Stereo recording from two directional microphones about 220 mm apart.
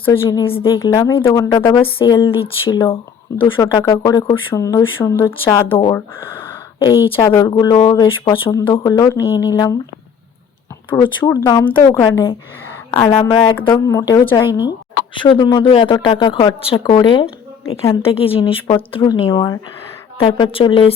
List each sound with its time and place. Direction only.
0.1 s speech: 15° left (ahead or behind)
6.7 s speech: 20° left (ahead or behind)
10.9 s speech: 20° left (ahead or behind)